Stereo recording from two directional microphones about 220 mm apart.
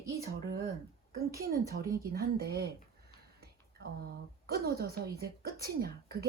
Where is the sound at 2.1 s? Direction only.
45° right (ahead or behind).